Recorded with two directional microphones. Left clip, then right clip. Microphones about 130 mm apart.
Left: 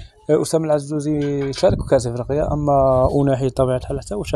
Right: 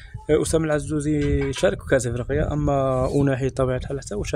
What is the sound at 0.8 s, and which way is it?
Speech, 40° right (ahead or behind).